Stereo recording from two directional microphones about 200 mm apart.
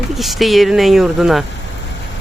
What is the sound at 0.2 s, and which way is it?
Speech, centre (ahead or behind).